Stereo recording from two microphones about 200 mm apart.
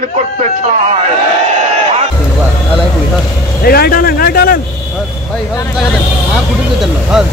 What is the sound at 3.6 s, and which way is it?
Speech, 50° left (ahead or behind).